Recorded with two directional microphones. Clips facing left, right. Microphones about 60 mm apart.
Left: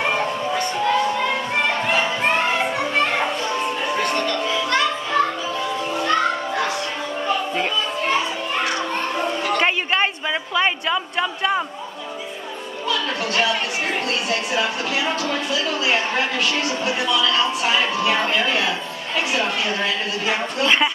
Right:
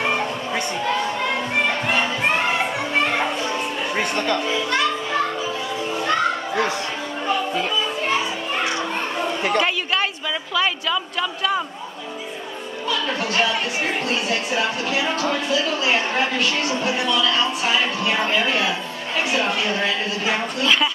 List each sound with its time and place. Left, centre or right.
0.0 s music: centre
0.8 s crowd: centre
4.0 s music: centre
10.5 s a woman's voice: left
12.9 s a woman's voice: centre
20.6 s speech: left